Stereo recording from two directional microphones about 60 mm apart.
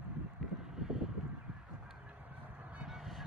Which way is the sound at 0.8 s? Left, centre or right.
Centre.